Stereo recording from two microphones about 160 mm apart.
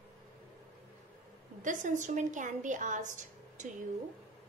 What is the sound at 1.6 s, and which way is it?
A woman's voice, 50° right (ahead or behind).